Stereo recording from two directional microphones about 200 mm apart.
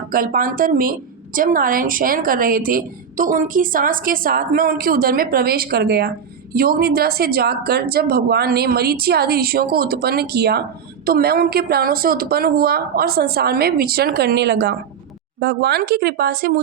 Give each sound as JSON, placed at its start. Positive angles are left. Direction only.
{"t": 0.1, "sound": "a woman's voice", "side_deg": -45}